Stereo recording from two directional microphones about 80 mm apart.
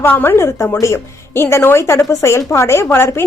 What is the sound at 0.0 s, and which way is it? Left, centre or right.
A woman's voice, left.